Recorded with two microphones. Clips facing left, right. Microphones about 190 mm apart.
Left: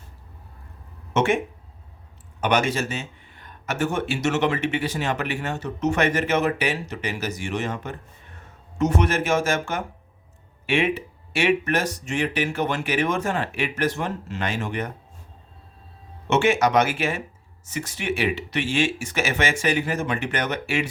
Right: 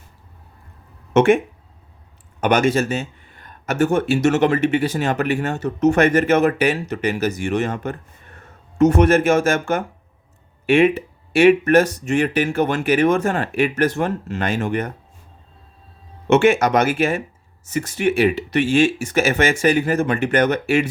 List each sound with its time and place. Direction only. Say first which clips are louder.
1.1 s speech: right 8 dB; 55° right (ahead or behind)
2.4 s speech: right 5 dB; 50° right (ahead or behind)
16.2 s speech: right 5 dB; 55° right (ahead or behind)